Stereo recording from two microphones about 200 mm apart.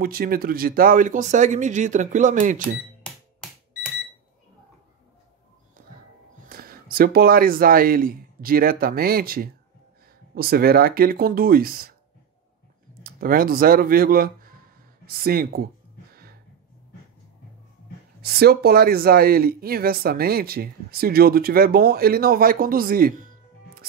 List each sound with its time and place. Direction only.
0.0 s speech: 45° right (ahead or behind)
5.8 s music: 45° right (ahead or behind)
6.5 s speech: 50° right (ahead or behind)
13.0 s speech: 45° right (ahead or behind)
18.2 s speech: 50° right (ahead or behind)